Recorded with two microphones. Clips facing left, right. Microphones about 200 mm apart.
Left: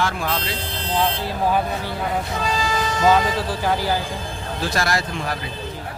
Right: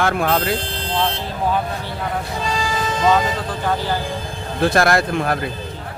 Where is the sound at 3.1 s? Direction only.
10° left (ahead or behind).